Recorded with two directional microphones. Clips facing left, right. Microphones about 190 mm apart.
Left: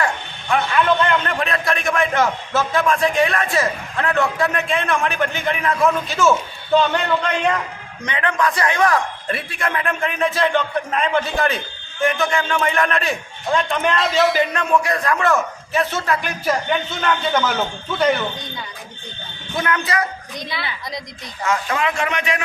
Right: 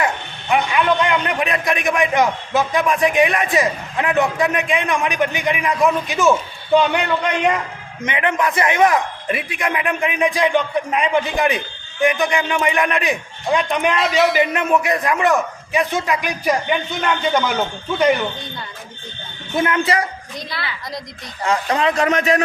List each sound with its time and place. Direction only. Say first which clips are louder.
0.0 s a sound: right 1 dB; 15° right (ahead or behind)
0.9 s a man's voice: right 1 dB; 10° right (ahead or behind)
13.9 s a man's voice: even; centre (ahead or behind)
14.5 s a man's voice: right 1 dB; 20° right (ahead or behind)
19.6 s a woman's voice: right 2 dB; 25° right (ahead or behind)
21.4 s a man's voice: right 3 dB; 35° right (ahead or behind)